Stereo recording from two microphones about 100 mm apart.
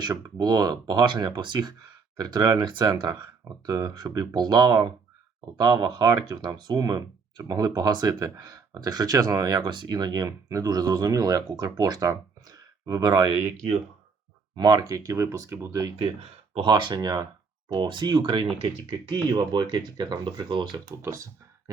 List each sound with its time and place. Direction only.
0.3 s speech: 40° right (ahead or behind)
14.5 s speech: 45° right (ahead or behind); by 15.8 s 25° right (ahead or behind)
16.0 s speech: 70° right (ahead or behind)
16.6 s speech: 50° right (ahead or behind)
21.0 s speech: 30° right (ahead or behind)